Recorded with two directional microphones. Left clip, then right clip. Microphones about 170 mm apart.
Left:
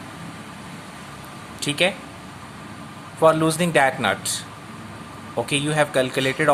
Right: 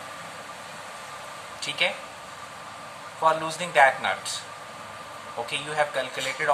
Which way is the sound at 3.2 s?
60° left (ahead or behind).